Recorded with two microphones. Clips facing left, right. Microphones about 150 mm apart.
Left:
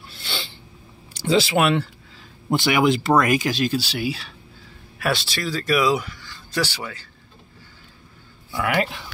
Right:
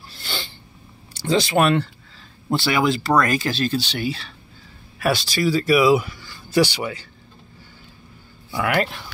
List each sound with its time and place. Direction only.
0.1 s sneeze: centre (ahead or behind)
1.2 s speech: 5° left (ahead or behind)
2.5 s speech: 15° left (ahead or behind); by 7.1 s 15° right (ahead or behind)
8.5 s speech: centre (ahead or behind)